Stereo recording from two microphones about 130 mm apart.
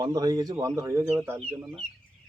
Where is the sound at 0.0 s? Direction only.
30° right (ahead or behind).